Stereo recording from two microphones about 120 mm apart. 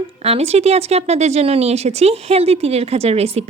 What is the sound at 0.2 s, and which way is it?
Speech, 60° right (ahead or behind).